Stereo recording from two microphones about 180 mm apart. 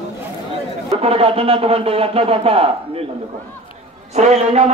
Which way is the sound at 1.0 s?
30° right (ahead or behind).